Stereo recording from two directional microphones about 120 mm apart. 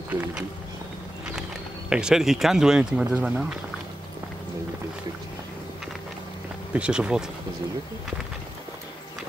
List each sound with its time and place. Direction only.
1.9 s speech: 5° right (ahead or behind)
6.7 s speech: 10° right (ahead or behind)